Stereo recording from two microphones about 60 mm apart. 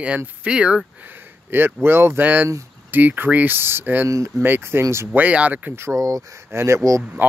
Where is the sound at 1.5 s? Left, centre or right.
Right.